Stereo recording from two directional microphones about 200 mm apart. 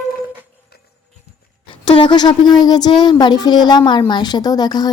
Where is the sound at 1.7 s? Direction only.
25° left (ahead or behind).